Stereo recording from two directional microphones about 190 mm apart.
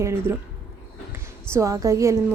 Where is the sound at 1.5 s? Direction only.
15° right (ahead or behind).